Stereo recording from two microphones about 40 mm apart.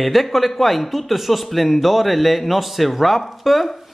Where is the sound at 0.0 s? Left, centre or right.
Centre.